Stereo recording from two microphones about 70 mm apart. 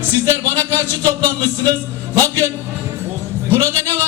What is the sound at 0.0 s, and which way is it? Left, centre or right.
Speech, right.